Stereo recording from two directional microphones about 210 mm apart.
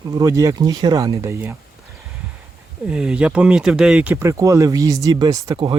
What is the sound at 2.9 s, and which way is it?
Speech, 5° right (ahead or behind).